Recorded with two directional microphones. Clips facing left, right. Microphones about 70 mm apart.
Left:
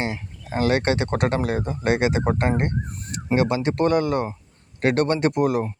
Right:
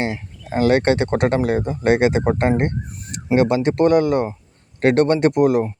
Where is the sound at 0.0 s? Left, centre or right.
Right.